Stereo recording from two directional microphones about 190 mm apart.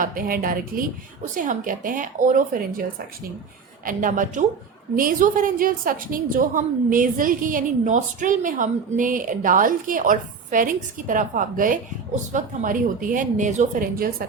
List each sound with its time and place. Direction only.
0.0 s a woman's voice: 45° right (ahead or behind)
3.8 s a woman's voice: 45° right (ahead or behind)
14.2 s a woman's voice: 50° right (ahead or behind)